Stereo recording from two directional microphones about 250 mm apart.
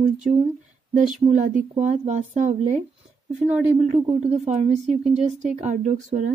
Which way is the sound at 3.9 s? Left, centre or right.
Right.